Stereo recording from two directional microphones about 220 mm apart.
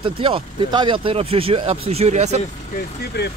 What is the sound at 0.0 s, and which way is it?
A man's voice, 25° right (ahead or behind).